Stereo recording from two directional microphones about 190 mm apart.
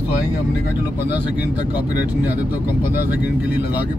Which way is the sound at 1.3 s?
10° right (ahead or behind).